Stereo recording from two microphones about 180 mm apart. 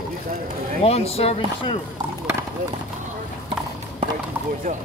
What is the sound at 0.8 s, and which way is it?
Speech, 35° left (ahead or behind).